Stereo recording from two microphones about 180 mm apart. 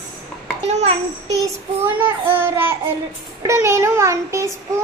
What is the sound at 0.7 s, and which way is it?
Speech, 40° right (ahead or behind).